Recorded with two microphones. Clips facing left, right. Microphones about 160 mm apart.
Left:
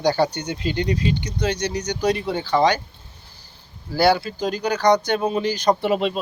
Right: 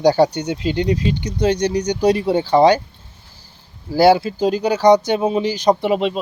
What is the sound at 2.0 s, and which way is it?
Speech, 35° right (ahead or behind).